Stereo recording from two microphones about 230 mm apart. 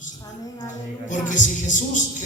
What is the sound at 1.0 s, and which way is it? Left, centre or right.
Speech, left.